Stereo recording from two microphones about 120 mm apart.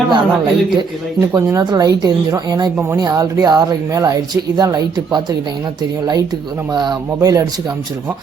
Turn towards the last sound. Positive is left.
turn(degrees=-30)  # may be behind; listen again after turning